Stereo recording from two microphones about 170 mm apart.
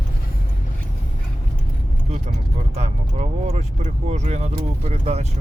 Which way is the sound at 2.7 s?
40° right (ahead or behind).